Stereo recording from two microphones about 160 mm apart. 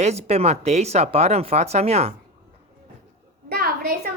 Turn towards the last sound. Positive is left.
turn(degrees=-75)  # may be behind; listen again after turning